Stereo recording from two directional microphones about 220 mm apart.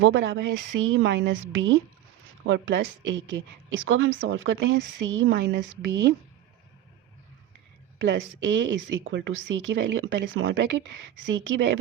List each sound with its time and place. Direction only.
0.0 s a woman's voice: 55° right (ahead or behind)
7.9 s speech: 55° right (ahead or behind)